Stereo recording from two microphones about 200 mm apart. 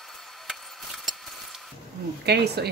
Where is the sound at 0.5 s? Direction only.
Centre (ahead or behind).